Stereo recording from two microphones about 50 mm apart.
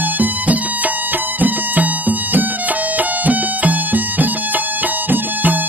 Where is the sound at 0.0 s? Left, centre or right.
Right.